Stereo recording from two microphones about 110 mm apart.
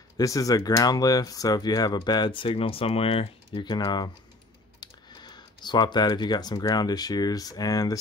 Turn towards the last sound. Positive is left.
turn(degrees=35)  # may be behind; listen again after turning